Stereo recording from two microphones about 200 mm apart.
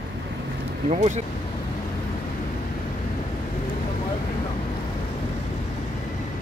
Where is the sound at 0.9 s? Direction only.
35° right (ahead or behind).